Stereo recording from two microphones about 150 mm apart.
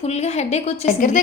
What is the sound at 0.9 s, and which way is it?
Speech, 60° left (ahead or behind).